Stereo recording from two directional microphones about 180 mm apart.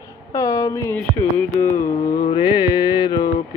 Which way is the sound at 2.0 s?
55° left (ahead or behind).